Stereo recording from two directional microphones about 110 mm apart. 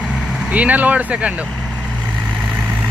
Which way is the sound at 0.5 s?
15° right (ahead or behind).